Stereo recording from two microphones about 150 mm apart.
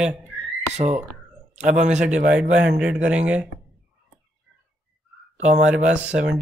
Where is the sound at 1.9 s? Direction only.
5° right (ahead or behind).